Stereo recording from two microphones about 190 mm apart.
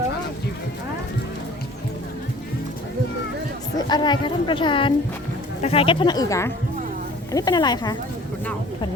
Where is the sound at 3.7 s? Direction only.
20° left (ahead or behind).